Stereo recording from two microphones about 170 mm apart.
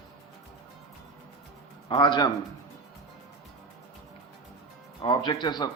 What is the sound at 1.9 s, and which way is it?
Speech, 25° left (ahead or behind).